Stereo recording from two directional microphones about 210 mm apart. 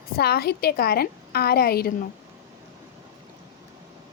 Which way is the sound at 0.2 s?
50° left (ahead or behind).